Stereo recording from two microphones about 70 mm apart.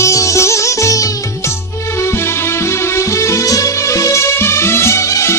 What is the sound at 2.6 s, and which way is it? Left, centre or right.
Music, left.